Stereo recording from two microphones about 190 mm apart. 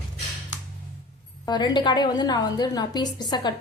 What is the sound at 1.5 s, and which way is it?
Speech, 20° left (ahead or behind).